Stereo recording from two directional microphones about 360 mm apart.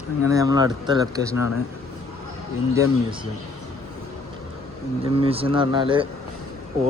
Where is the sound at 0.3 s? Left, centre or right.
Centre.